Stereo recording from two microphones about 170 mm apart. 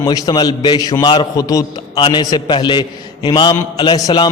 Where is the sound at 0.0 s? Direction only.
25° left (ahead or behind).